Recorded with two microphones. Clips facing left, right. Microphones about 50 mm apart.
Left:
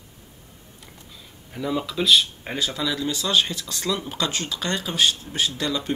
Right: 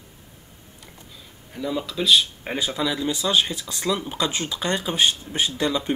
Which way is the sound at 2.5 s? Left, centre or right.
Centre.